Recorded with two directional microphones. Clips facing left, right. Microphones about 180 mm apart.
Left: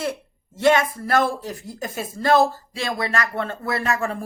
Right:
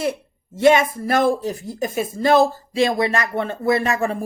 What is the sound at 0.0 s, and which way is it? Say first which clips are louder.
Speech: right 4 dB; 15° right (ahead or behind).